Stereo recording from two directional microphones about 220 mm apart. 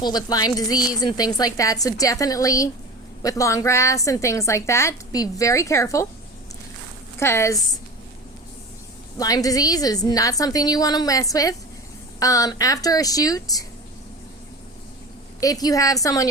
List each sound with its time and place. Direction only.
0.0 s a woman's voice: 20° left (ahead or behind)
7.2 s a woman's voice: 10° left (ahead or behind)
9.1 s a woman's voice: 15° left (ahead or behind)
15.4 s a woman's voice: 15° left (ahead or behind)